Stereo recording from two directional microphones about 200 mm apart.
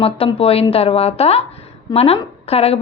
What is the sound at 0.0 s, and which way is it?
A woman's voice, 30° left (ahead or behind).